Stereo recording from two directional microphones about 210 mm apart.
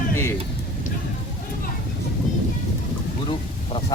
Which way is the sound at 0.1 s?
10° left (ahead or behind).